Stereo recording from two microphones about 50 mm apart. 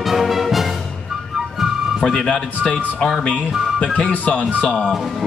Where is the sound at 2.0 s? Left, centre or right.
Centre.